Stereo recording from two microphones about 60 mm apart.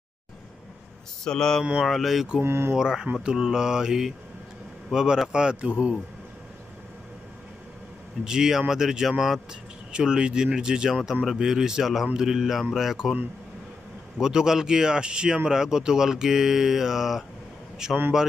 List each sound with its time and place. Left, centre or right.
1.2 s mantra: centre
1.8 s speech: centre
2.4 s speech: right
2.7 s speech: centre
8.2 s speech: centre
14.2 s speech: centre